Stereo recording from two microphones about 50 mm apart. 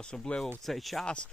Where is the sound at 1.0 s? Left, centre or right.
Centre.